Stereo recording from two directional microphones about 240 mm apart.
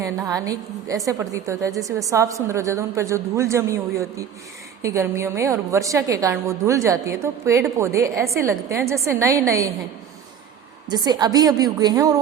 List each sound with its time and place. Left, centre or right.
0.0 s a woman's voice: centre
10.8 s a woman's voice: centre